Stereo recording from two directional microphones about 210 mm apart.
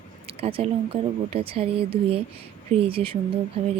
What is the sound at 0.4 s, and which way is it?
Speech, 25° right (ahead or behind).